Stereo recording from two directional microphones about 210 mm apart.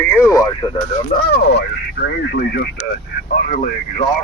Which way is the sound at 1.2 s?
50° left (ahead or behind).